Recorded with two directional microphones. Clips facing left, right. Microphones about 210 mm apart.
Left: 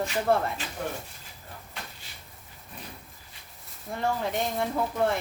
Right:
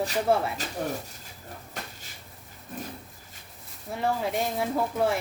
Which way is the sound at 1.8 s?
45° right (ahead or behind).